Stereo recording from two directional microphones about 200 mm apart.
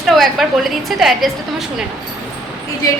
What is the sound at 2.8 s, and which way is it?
Speech, 15° left (ahead or behind).